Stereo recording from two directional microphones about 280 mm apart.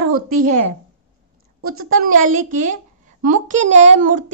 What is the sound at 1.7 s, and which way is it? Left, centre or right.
A child's voice, right.